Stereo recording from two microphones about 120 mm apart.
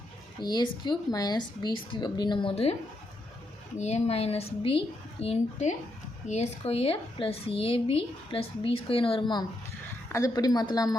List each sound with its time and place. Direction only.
0.3 s speech: 35° left (ahead or behind); by 2.7 s 50° left (ahead or behind)
3.8 s a woman's voice: 65° left (ahead or behind)
5.2 s a woman's voice: 65° left (ahead or behind); by 9.4 s 45° left (ahead or behind)
10.1 s speech: 30° left (ahead or behind)